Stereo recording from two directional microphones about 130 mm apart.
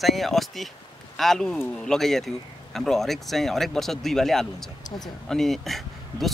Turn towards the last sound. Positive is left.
turn(degrees=0)  # may be behind; listen again after turning